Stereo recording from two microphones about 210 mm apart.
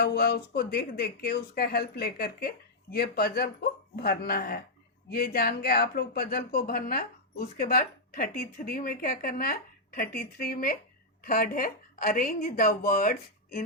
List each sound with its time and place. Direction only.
0.0 s speech: 50° left (ahead or behind)